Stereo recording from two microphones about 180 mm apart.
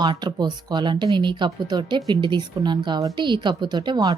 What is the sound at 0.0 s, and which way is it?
Speech, 25° right (ahead or behind).